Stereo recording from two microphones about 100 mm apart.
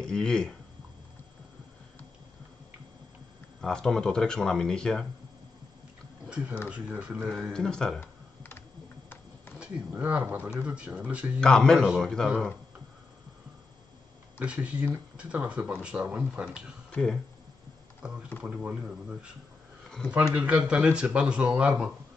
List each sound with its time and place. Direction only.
0.0 s speech: 5° left (ahead or behind)
3.6 s speech: 5° left (ahead or behind)
6.2 s speech: 10° right (ahead or behind)
7.5 s speech: 5° left (ahead or behind)
8.0 s computer keyboard: 25° left (ahead or behind)
9.6 s speech: 15° right (ahead or behind)
11.4 s speech: 5° left (ahead or behind)
14.4 s speech: 10° right (ahead or behind)
16.9 s speech: 5° left (ahead or behind)
18.0 s speech: 10° right (ahead or behind)